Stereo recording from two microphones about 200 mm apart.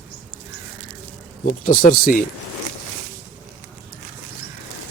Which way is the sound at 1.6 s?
45° left (ahead or behind).